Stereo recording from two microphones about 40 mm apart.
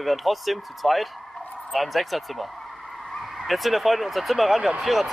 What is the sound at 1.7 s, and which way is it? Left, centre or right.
Vehicle, centre.